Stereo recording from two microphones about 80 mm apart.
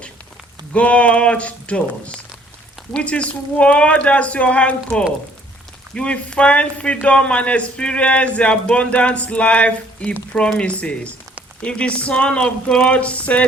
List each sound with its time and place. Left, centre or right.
0.7 s speech: centre